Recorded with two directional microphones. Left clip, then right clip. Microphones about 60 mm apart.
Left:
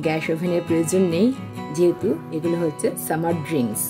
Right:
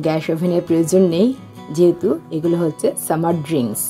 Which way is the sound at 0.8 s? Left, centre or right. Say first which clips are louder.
Right 6 dB; centre.